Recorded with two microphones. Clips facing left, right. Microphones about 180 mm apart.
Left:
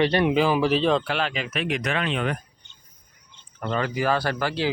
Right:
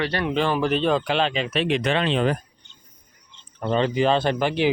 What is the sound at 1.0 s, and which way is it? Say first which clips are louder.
Speech: right 4 dB; 25° right (ahead or behind).